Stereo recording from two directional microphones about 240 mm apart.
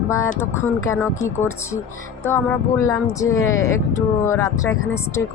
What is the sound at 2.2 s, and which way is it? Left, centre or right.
Speech, centre.